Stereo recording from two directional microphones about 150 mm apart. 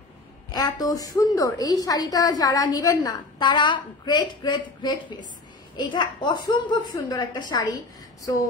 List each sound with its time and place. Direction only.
0.5 s a woman's voice: 25° left (ahead or behind)